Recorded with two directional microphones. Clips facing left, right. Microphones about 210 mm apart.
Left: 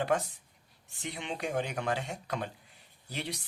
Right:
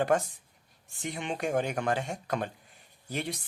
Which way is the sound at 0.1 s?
50° right (ahead or behind).